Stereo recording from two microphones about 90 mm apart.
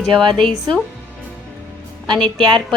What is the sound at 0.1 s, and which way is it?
Speech, 65° right (ahead or behind).